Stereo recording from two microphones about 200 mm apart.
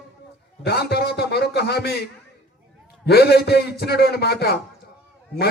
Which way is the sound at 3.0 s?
55° left (ahead or behind).